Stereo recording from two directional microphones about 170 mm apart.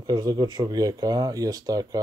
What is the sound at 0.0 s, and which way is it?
Speech, 25° right (ahead or behind).